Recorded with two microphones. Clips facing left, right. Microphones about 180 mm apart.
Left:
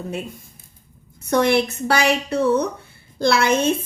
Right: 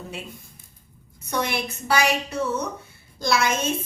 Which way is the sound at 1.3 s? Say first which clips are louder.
Left 9 dB; 60° left (ahead or behind).